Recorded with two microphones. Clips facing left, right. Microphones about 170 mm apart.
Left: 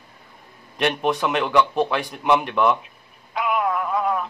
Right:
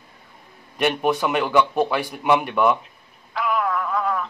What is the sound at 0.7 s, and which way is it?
A man's voice, 5° right (ahead or behind).